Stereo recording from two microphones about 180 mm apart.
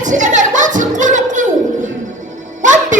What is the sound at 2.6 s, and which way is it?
Music, 45° right (ahead or behind).